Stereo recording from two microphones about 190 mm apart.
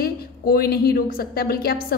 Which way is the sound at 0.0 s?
55° left (ahead or behind).